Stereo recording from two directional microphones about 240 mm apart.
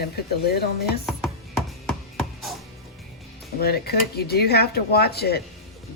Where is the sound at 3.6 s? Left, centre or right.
Left.